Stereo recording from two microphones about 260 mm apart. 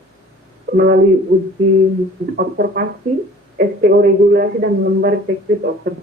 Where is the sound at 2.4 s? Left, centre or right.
Right.